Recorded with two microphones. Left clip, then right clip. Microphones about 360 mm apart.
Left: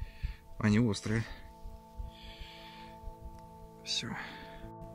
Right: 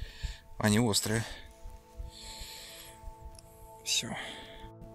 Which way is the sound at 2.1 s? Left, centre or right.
Centre.